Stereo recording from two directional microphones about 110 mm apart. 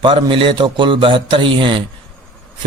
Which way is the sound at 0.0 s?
50° right (ahead or behind).